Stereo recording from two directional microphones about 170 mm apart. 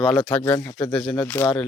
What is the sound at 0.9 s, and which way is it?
Speech, centre (ahead or behind).